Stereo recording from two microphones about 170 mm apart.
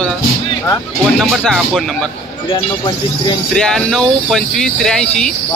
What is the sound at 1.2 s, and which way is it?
Speech, centre (ahead or behind).